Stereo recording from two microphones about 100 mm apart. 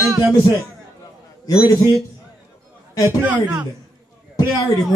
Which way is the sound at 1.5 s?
35° left (ahead or behind).